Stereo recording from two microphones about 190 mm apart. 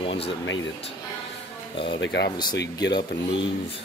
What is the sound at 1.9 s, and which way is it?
Speech, 65° left (ahead or behind).